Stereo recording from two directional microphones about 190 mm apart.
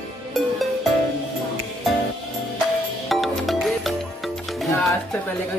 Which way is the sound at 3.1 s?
Centre (ahead or behind).